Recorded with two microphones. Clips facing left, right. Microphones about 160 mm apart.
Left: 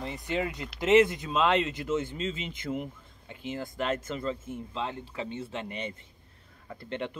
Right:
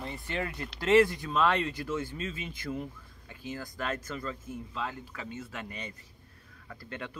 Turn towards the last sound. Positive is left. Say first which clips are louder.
# left 6 dB
turn(degrees=25)  # may be behind; listen again after turning